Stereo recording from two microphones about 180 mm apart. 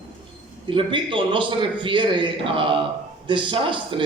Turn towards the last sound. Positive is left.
turn(degrees=-30)  # may be behind; listen again after turning